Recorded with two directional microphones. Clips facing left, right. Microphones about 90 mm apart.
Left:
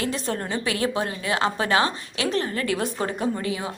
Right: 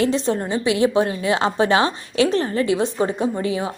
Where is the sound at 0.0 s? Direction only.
25° right (ahead or behind).